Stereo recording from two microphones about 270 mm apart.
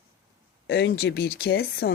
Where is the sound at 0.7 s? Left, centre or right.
Left.